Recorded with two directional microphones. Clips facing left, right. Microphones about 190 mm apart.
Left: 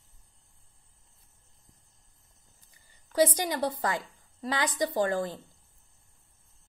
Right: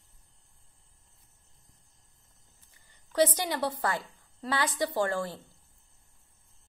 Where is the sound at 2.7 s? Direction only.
10° left (ahead or behind).